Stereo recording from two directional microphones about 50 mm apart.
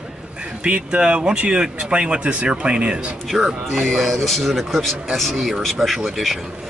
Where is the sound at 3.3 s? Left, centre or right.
Centre.